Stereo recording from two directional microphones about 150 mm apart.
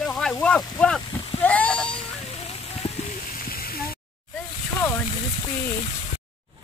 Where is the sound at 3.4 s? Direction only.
80° left.